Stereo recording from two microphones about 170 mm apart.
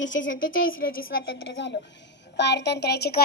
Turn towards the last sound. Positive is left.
turn(degrees=70)  # may be behind; listen again after turning